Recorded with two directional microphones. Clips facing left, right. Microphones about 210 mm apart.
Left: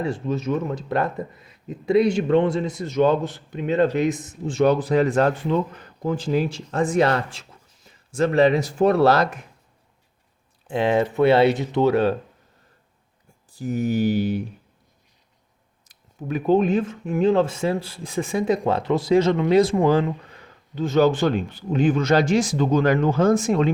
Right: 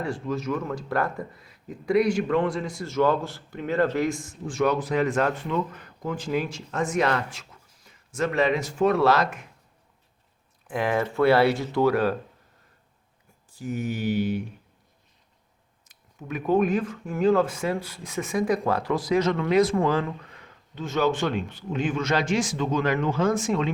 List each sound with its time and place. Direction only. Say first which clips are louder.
0.0 s speech: left 4 dB; 25° left (ahead or behind)
10.7 s speech: left 5 dB; 25° left (ahead or behind)
13.5 s speech: left 6 dB; 35° left (ahead or behind)
15.9 s speech: left 6 dB; 35° left (ahead or behind)